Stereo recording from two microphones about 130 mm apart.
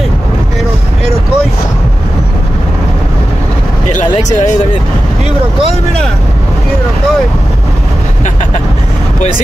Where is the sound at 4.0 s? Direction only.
65° left (ahead or behind).